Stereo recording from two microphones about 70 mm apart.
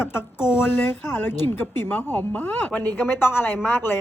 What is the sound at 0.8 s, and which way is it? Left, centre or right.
A woman's voice, left.